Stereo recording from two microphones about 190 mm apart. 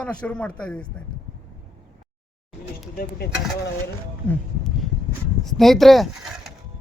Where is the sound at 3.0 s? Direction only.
55° left (ahead or behind).